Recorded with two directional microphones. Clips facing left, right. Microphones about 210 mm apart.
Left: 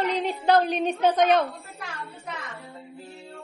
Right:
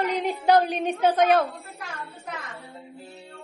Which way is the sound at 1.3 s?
Centre (ahead or behind).